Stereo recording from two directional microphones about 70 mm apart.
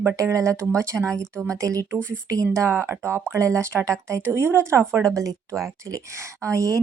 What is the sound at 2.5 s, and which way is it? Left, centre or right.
Speech, right.